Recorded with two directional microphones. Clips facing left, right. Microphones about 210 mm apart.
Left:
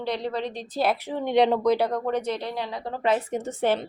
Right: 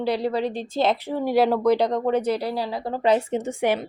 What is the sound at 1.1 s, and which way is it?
Speech, 5° right (ahead or behind).